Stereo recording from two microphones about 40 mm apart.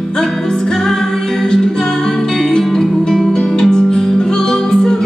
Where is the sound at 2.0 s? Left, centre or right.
Centre.